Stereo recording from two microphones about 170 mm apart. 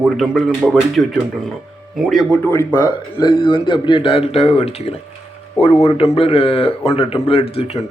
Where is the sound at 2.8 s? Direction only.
25° left (ahead or behind).